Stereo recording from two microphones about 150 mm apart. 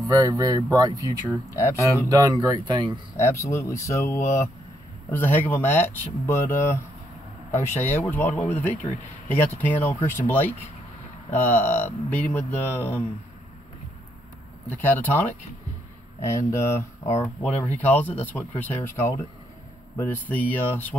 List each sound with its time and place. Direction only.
0.1 s speech: 25° right (ahead or behind)
1.5 s speech: 20° left (ahead or behind)
2.0 s speech: 25° right (ahead or behind)
3.2 s speech: 20° left (ahead or behind)
14.7 s speech: 10° left (ahead or behind)
16.3 s speech: 20° left (ahead or behind)